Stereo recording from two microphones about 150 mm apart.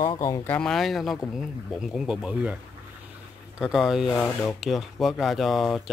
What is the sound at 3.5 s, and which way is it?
Speech, 5° right (ahead or behind).